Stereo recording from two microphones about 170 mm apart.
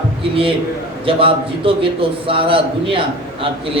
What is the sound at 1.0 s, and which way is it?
A man's voice, 30° right (ahead or behind).